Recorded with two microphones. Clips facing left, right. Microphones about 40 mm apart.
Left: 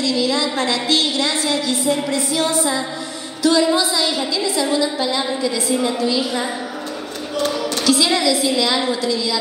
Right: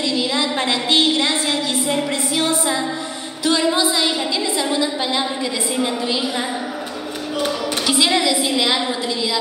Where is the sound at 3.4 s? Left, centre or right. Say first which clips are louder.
Left 3 dB; right.